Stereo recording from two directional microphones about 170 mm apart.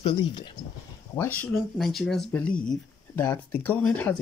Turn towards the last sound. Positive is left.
turn(degrees=10)  # may be behind; listen again after turning